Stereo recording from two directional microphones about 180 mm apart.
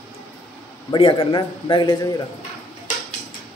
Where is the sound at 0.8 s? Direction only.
30° left (ahead or behind).